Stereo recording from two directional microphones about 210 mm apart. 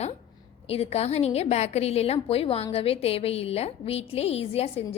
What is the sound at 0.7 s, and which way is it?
A woman's voice, 30° left (ahead or behind).